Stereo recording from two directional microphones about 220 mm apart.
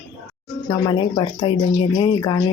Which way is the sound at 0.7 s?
20° left (ahead or behind).